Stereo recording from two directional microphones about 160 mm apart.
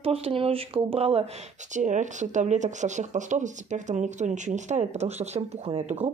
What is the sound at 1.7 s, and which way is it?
Speech, 50° right (ahead or behind).